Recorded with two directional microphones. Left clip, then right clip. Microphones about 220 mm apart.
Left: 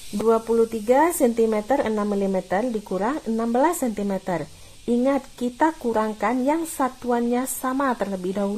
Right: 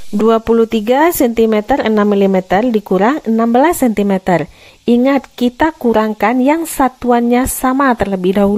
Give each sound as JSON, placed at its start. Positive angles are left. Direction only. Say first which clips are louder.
{"t": 0.2, "sound": "speech", "louder": "right 8 dB", "side_deg": -45}